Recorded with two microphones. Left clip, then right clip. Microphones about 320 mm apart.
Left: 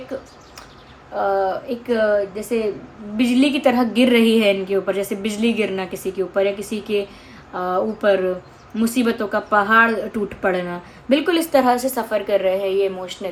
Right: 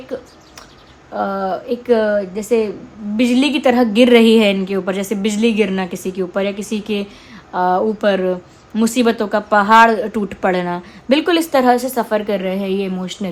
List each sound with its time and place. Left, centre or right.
1.1 s a woman's voice: right